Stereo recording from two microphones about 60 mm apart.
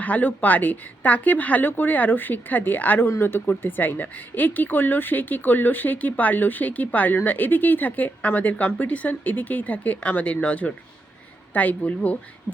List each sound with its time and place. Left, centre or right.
0.0 s speech: left